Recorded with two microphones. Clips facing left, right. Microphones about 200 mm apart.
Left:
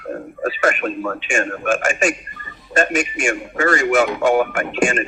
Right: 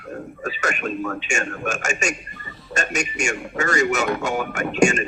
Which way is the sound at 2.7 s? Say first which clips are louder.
Left 7 dB; 45° right (ahead or behind).